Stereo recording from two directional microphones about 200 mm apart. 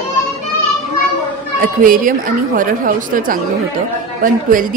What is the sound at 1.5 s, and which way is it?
A woman's voice, 45° right (ahead or behind).